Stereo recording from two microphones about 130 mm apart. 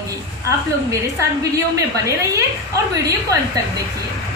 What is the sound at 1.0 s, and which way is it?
A woman's voice, 25° right (ahead or behind).